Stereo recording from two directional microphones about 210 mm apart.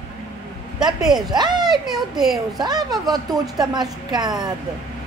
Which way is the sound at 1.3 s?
20° right (ahead or behind).